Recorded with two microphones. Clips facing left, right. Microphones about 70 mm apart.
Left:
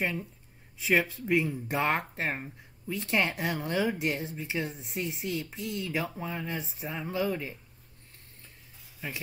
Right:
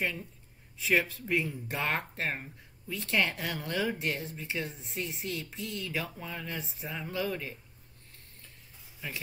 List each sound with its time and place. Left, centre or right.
0.0 s speech: left
0.7 s speech: centre